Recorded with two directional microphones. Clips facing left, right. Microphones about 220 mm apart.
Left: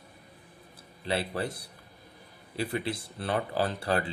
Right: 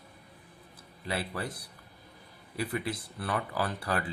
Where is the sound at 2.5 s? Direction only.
30° left (ahead or behind).